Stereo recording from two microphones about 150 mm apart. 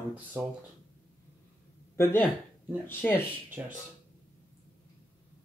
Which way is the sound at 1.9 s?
15° left (ahead or behind).